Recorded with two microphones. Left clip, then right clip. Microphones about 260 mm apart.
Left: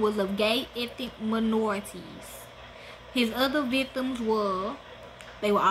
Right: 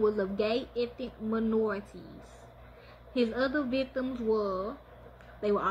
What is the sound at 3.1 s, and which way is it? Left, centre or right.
Speech, left.